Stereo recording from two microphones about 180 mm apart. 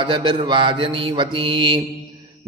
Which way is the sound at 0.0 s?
25° right (ahead or behind).